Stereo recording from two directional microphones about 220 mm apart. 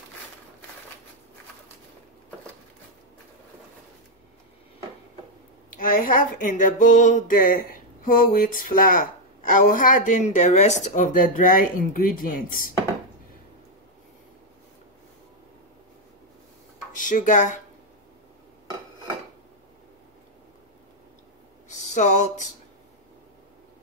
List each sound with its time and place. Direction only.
5.8 s a woman's voice: 40° left (ahead or behind)
17.0 s speech: 35° left (ahead or behind)
21.6 s a sound: 30° left (ahead or behind)